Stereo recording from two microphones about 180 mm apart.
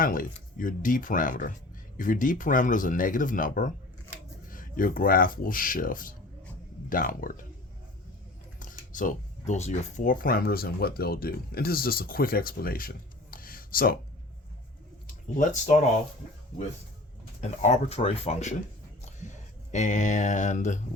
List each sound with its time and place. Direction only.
0.0 s speech: 50° left (ahead or behind)
8.5 s speech: 45° left (ahead or behind)
13.3 s a sound: 55° left (ahead or behind)
15.0 s speech: 45° left (ahead or behind)
17.4 s speech: 40° left (ahead or behind)
19.7 s speech: 40° left (ahead or behind)